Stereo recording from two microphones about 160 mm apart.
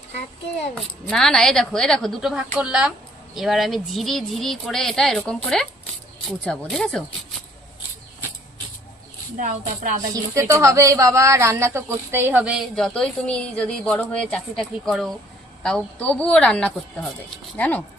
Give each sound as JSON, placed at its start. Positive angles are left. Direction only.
{"t": 1.0, "sound": "speech", "side_deg": 5}
{"t": 9.4, "sound": "speech", "side_deg": -50}
{"t": 10.3, "sound": "a woman's voice", "side_deg": -15}